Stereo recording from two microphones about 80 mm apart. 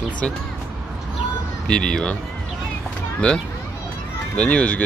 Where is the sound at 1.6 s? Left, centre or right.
Centre.